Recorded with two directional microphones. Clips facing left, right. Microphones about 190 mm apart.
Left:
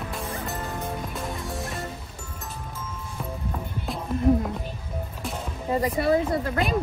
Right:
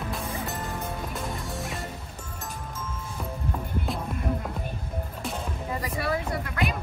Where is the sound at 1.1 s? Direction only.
Centre (ahead or behind).